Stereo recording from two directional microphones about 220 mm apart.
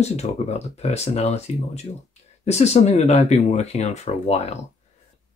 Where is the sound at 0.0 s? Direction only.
30° left (ahead or behind).